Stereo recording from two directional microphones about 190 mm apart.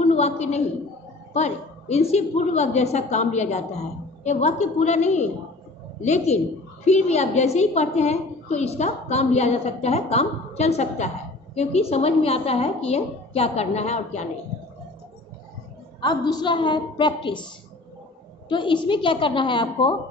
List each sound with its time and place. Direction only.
0.0 s a sound: 35° left (ahead or behind)
1.3 s a woman's voice: 35° left (ahead or behind)
16.0 s a woman's voice: 20° left (ahead or behind)
18.5 s a woman's voice: 25° left (ahead or behind)